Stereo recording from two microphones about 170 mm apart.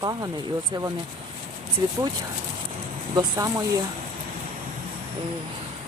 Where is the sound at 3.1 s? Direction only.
25° right (ahead or behind).